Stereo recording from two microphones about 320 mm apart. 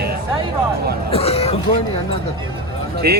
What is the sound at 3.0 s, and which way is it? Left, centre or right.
Speech, right.